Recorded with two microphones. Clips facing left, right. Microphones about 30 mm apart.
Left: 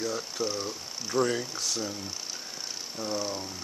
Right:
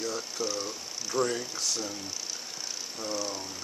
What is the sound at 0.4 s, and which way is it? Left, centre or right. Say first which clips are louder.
Speech: left 1 dB; left.